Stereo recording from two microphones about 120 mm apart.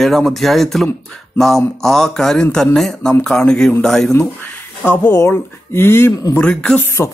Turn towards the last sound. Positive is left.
turn(degrees=25)  # may be behind; listen again after turning